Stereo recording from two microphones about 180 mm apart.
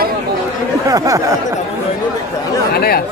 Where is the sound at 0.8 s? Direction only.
20° right (ahead or behind).